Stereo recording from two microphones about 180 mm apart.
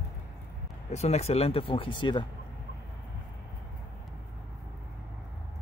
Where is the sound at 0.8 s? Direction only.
35° left (ahead or behind).